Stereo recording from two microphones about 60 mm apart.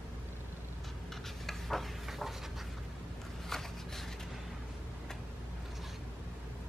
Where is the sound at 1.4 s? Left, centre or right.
Centre.